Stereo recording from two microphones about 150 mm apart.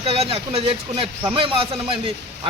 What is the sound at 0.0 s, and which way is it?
A man's voice, 40° right (ahead or behind).